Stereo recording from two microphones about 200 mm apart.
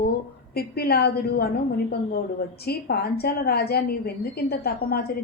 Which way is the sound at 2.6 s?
50° left (ahead or behind).